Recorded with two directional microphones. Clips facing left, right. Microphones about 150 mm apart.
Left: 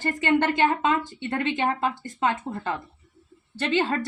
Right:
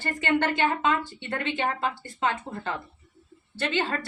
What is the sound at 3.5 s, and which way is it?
Speech, 35° left (ahead or behind).